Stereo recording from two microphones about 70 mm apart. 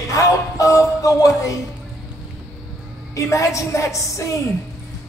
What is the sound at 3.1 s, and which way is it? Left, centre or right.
A man's voice, left.